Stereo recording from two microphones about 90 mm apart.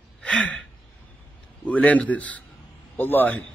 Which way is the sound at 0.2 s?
15° left (ahead or behind).